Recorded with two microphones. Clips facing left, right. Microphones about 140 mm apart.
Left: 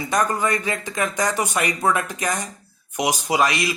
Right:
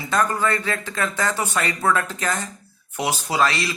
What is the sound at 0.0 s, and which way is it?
Speech, 15° left (ahead or behind).